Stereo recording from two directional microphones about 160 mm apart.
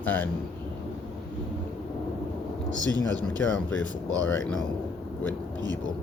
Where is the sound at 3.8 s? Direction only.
20° right (ahead or behind).